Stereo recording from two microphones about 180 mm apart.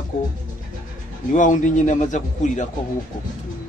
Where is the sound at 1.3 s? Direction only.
45° left (ahead or behind).